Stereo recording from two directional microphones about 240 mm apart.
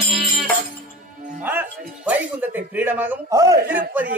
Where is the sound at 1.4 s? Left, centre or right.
Centre.